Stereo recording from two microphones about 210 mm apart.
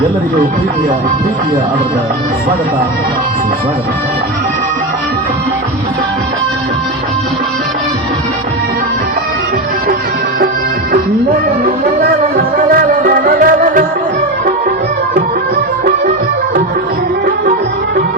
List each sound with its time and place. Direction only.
12.7 s music: 40° right (ahead or behind)